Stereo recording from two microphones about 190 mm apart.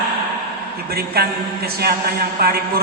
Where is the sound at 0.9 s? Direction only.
55° right (ahead or behind).